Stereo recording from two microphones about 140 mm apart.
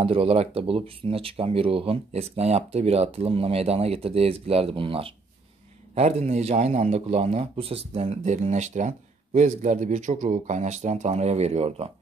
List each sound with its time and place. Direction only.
0.0 s speech: 40° right (ahead or behind)
5.9 s speech: 50° right (ahead or behind)
8.2 s speech: 60° right (ahead or behind)